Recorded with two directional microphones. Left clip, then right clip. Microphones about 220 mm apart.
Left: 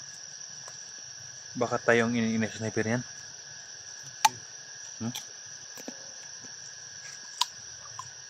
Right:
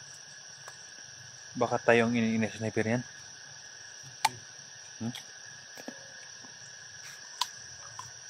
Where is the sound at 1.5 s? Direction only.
Centre (ahead or behind).